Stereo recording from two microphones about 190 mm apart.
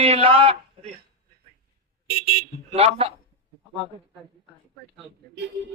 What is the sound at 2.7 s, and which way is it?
Speech, 30° right (ahead or behind).